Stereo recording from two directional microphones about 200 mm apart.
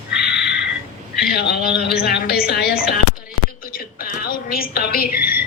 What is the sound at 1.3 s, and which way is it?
A woman's voice, 55° left (ahead or behind).